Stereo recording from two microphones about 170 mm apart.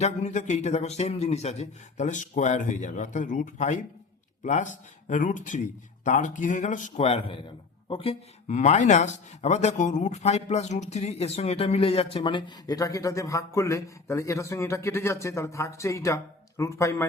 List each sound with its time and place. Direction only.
0.0 s a man's voice: 45° left (ahead or behind); by 17.1 s 15° left (ahead or behind)